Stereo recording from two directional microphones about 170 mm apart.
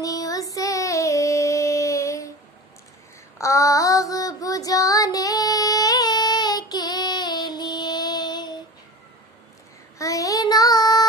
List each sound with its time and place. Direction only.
0.0 s female singing: 20° left (ahead or behind)
3.3 s child singing: 20° left (ahead or behind)
9.9 s child singing: 20° left (ahead or behind)